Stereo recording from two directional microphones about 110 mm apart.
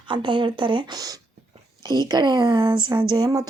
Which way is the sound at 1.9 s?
40° right (ahead or behind).